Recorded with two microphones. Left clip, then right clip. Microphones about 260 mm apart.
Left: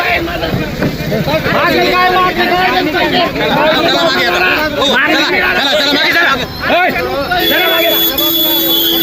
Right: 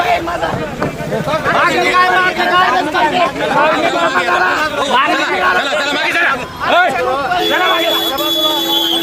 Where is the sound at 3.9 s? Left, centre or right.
Right.